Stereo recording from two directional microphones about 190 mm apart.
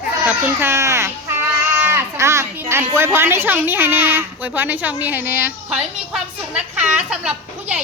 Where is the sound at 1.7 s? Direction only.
10° right (ahead or behind).